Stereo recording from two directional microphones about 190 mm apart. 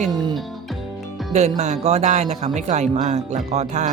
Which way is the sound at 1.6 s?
35° right (ahead or behind).